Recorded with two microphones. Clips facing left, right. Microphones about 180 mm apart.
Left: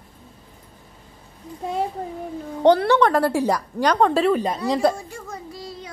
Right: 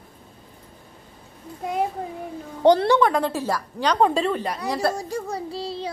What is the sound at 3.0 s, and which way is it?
Speech, centre (ahead or behind).